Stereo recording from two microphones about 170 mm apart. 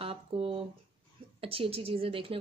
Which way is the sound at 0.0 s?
35° right (ahead or behind).